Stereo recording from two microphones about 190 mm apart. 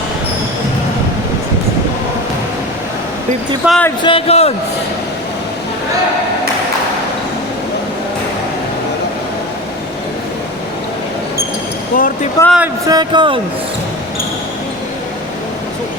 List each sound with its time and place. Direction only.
3.7 s speech: 5° left (ahead or behind)
4.0 s a man's voice: 30° left (ahead or behind)
11.9 s a sound: 50° left (ahead or behind)
12.4 s speech: 15° left (ahead or behind)
12.9 s speech: 20° right (ahead or behind)